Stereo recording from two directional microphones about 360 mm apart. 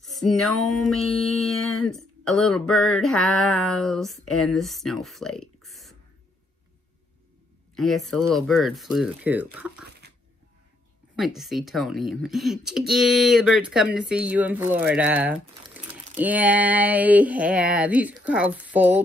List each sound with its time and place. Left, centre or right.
0.0 s music: centre
1.9 s speech: centre
7.7 s speech: centre
9.8 s a sound: right
11.1 s speech: centre